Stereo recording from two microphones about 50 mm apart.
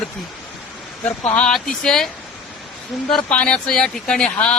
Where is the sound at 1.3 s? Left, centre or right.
Centre.